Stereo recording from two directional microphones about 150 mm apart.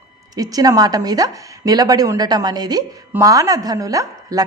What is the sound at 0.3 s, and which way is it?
A woman's voice, 25° right (ahead or behind).